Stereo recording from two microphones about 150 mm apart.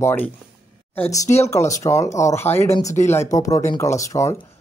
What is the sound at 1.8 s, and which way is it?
Speech, 20° left (ahead or behind).